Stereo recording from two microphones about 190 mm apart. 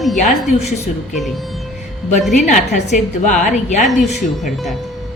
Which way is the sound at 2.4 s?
40° left (ahead or behind).